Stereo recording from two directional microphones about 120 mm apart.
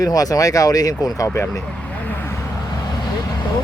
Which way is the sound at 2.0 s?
20° left (ahead or behind).